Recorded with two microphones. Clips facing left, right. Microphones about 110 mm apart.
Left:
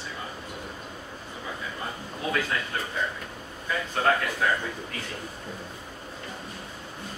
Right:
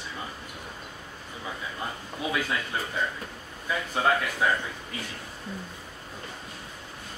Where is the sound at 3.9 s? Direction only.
10° right (ahead or behind).